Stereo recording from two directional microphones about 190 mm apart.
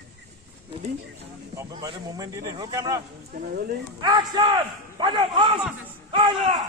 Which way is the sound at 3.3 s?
45° right (ahead or behind).